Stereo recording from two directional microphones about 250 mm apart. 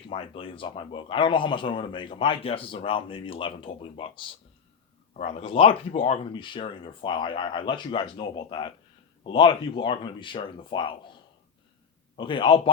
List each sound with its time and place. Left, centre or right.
0.1 s a man's voice: left
12.1 s a man's voice: centre